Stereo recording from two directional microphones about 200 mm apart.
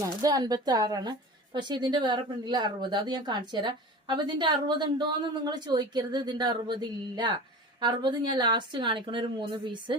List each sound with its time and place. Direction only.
0.0 s speech: 20° right (ahead or behind)